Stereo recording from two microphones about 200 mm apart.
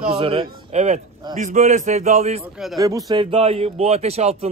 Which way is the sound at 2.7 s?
15° right (ahead or behind).